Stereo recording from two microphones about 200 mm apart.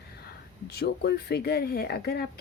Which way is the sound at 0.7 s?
50° left (ahead or behind).